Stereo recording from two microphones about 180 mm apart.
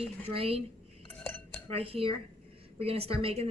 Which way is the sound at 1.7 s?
30° right (ahead or behind).